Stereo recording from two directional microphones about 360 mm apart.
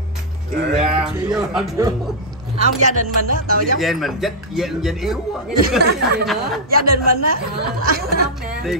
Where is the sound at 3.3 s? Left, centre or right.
Right.